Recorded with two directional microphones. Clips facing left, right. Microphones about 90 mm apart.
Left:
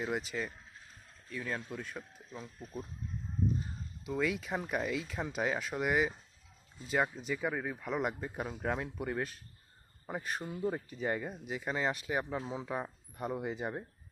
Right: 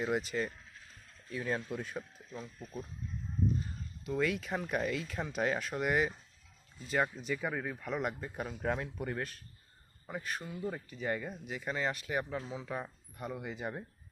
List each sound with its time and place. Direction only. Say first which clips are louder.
0.0 s speech: right 3 dB; centre (ahead or behind)
4.0 s speech: right 1 dB; 10° left (ahead or behind)
10.1 s speech: left 2 dB; 25° left (ahead or behind)
13.2 s speech: left 3 dB; 25° left (ahead or behind)